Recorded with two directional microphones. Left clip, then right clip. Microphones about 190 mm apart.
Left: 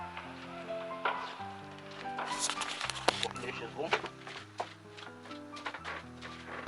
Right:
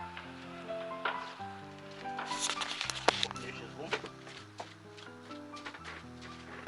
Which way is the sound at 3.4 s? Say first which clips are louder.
Left 5 dB; 10° right (ahead or behind).